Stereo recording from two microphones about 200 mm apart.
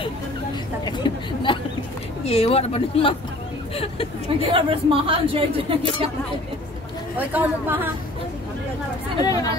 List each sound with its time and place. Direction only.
0.8 s a sound: 25° left (ahead or behind)
2.2 s speech: 30° left (ahead or behind)
4.4 s speech: 25° right (ahead or behind)
7.2 s speech: 10° right (ahead or behind)
9.2 s speech: 15° left (ahead or behind)